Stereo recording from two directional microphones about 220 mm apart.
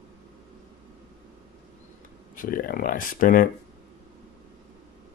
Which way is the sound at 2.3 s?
40° left (ahead or behind).